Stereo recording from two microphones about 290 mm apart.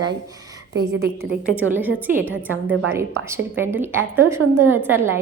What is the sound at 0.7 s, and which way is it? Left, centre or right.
Speech, right.